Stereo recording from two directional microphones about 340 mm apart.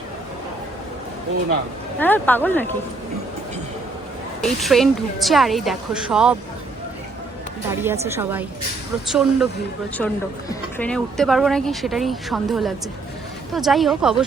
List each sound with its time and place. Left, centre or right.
2.0 s speech: centre
4.4 s speech: centre
7.7 s a woman's voice: centre